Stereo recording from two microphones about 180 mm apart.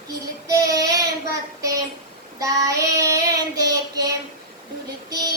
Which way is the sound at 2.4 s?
20° right (ahead or behind).